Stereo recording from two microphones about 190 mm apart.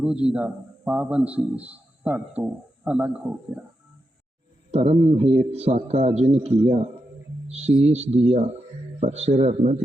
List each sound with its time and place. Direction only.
0.0 s a man's voice: 5° right (ahead or behind)
4.7 s a man's voice: 30° right (ahead or behind)